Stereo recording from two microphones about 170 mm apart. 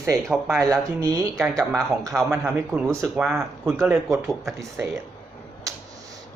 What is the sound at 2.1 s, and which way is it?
Speech, 15° right (ahead or behind).